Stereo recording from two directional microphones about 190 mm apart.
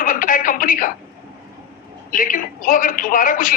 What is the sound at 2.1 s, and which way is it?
Speech, 45° left (ahead or behind).